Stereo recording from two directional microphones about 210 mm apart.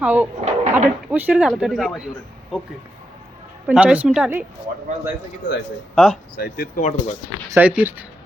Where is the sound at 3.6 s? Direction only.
5° right (ahead or behind).